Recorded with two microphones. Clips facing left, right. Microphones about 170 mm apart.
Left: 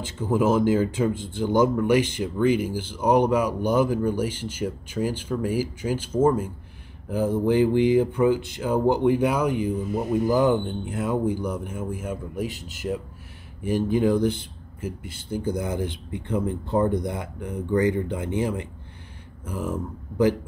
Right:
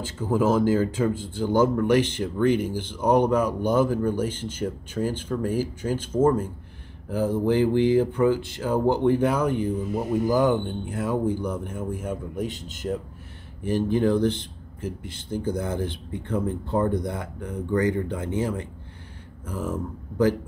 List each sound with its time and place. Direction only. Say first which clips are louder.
0.0 s speech: left 1 dB; 20° left (ahead or behind)
7.1 s speech: left 1 dB; 20° left (ahead or behind)